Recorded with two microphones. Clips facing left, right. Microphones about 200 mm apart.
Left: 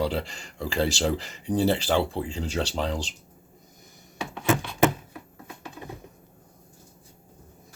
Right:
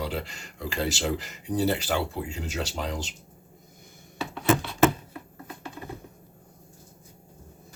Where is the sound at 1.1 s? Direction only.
30° left (ahead or behind).